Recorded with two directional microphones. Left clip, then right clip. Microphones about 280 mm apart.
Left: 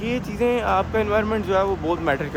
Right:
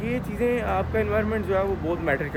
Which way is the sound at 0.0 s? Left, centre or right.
Centre.